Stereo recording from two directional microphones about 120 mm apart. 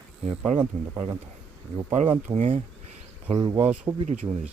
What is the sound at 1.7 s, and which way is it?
Speech, 50° right (ahead or behind).